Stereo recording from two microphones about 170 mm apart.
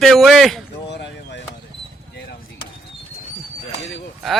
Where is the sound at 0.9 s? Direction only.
90° left.